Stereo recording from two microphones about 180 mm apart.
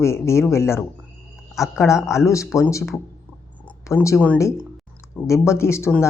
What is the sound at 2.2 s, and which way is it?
Speech, 15° left (ahead or behind).